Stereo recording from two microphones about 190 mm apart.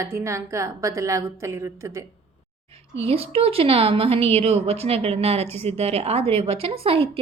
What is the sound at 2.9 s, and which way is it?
A woman's voice, 30° right (ahead or behind).